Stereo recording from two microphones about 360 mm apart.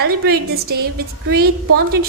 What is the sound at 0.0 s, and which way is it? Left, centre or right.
A woman's voice, right.